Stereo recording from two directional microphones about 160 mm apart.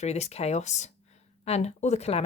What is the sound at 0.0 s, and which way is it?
Speech, 40° left (ahead or behind).